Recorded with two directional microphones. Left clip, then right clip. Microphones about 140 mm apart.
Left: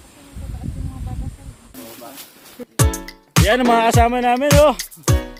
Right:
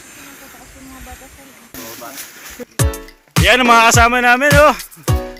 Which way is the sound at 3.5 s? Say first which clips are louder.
Right 6 dB; 35° left (ahead or behind).